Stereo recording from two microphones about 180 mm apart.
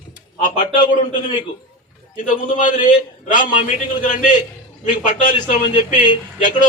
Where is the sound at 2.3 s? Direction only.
45° left (ahead or behind).